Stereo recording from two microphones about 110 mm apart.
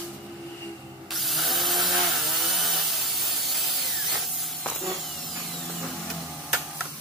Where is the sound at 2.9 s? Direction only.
Centre (ahead or behind).